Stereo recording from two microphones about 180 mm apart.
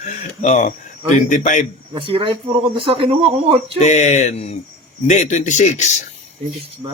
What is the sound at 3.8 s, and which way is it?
A man's voice, 40° left (ahead or behind).